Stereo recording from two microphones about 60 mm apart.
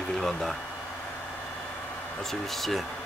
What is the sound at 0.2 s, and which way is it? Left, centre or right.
Speech, centre.